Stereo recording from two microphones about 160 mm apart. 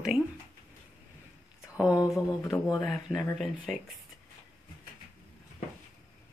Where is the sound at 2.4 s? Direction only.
20° left (ahead or behind).